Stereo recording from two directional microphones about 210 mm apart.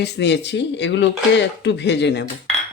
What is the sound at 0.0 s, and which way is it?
A woman's voice, 55° left (ahead or behind).